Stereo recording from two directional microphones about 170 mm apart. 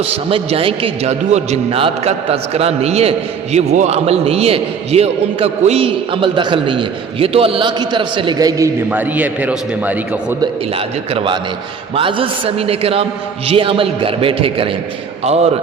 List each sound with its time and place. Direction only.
0.0 s a man's voice: 35° right (ahead or behind); by 10.3 s 10° right (ahead or behind)
10.4 s a man's voice: 30° right (ahead or behind)